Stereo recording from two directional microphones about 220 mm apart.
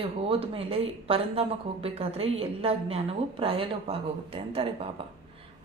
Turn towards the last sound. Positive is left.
turn(degrees=-25)  # may be behind; listen again after turning